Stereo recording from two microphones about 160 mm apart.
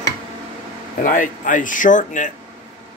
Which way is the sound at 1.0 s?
55° left (ahead or behind).